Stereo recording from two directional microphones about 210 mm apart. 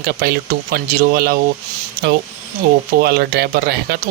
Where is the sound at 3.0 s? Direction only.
50° right (ahead or behind).